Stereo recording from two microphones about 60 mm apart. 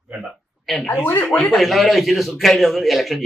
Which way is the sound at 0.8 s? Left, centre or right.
Left.